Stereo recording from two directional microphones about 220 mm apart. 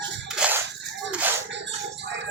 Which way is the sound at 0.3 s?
5° right (ahead or behind).